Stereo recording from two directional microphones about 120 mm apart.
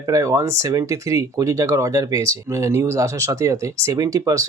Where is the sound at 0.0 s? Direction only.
30° right (ahead or behind).